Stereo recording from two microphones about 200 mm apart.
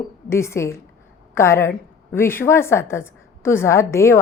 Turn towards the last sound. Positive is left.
turn(degrees=15)  # may be behind; listen again after turning